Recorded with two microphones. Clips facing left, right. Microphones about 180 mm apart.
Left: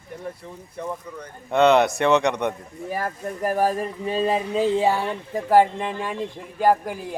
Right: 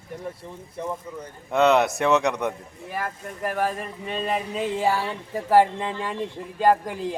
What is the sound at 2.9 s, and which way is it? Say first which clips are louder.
Speech: left 3 dB; 40° left (ahead or behind).